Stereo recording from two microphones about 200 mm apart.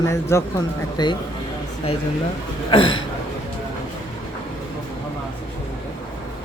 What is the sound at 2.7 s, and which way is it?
Speech, 25° left (ahead or behind).